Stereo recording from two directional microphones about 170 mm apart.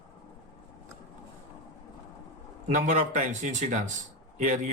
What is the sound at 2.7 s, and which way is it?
Speech, 45° right (ahead or behind).